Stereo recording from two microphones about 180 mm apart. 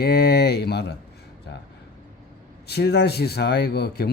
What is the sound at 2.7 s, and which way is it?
Speech, 65° left (ahead or behind).